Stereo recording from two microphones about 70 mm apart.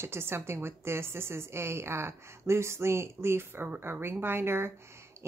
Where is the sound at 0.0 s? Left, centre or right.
Right.